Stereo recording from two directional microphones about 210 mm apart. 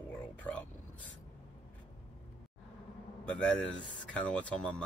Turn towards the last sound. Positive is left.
turn(degrees=5)  # may be behind; listen again after turning